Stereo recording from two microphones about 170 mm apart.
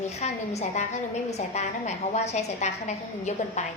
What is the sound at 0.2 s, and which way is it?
A woman's voice, 40° left (ahead or behind).